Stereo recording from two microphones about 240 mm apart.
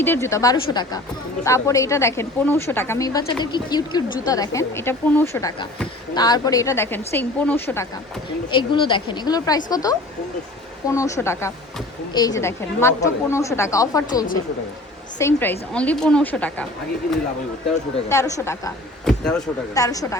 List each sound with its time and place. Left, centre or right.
0.0 s a woman's voice: centre
8.5 s a woman's voice: left
18.1 s a woman's voice: centre
19.0 s speech: centre
19.7 s a woman's voice: centre